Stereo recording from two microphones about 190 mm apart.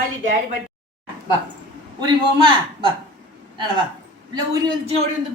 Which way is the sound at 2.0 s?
25° right (ahead or behind).